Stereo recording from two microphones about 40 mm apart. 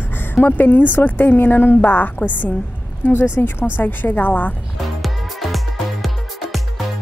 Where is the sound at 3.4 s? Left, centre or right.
Left.